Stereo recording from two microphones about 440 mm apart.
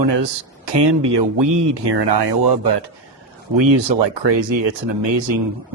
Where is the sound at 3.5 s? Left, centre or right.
Right.